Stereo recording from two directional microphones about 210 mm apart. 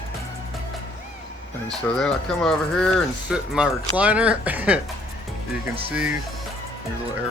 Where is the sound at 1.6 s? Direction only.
5° left (ahead or behind).